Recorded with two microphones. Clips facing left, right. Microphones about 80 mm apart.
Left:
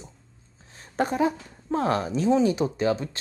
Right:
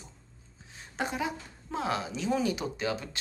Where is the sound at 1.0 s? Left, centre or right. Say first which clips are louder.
Left 9 dB; left.